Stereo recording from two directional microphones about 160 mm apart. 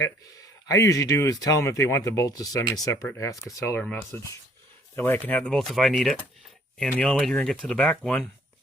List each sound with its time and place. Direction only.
0.7 s speech: 20° left (ahead or behind)